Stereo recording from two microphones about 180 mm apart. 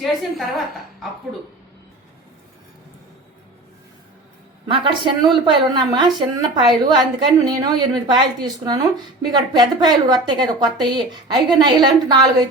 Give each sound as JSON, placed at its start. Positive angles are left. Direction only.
{"t": 0.0, "sound": "a woman's voice", "side_deg": 0}
{"t": 4.7, "sound": "a woman's voice", "side_deg": -25}